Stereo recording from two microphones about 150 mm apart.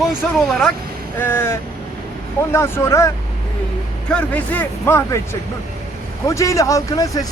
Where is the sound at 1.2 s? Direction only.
15° left (ahead or behind).